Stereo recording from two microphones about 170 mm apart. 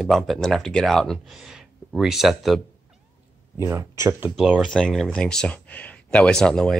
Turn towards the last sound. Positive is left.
turn(degrees=5)  # may be behind; listen again after turning